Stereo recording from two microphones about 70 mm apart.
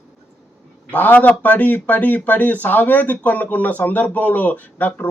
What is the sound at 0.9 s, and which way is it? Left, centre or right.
A man's voice, left.